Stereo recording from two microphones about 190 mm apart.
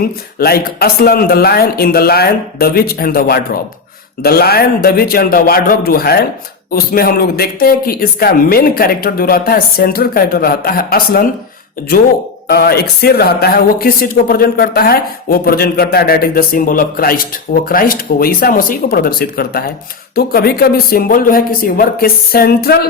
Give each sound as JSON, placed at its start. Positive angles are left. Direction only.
{"t": 0.0, "sound": "speech", "side_deg": 55}
{"t": 12.5, "sound": "speech", "side_deg": 55}